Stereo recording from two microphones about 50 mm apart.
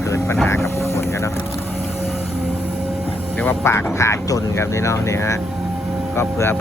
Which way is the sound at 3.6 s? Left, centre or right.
Left.